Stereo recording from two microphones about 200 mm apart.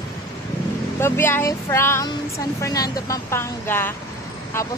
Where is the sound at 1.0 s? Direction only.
10° left (ahead or behind).